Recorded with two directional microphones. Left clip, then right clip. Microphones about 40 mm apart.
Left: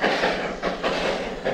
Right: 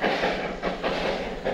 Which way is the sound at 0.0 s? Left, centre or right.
Left.